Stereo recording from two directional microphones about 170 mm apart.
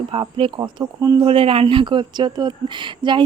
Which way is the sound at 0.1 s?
30° right (ahead or behind).